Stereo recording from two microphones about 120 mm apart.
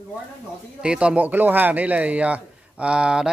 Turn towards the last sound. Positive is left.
turn(degrees=-5)  # may be behind; listen again after turning